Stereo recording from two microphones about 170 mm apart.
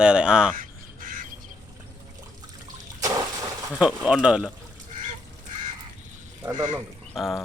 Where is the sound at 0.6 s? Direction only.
55° right (ahead or behind).